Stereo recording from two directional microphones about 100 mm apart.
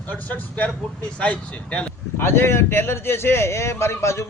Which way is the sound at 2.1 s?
25° left (ahead or behind).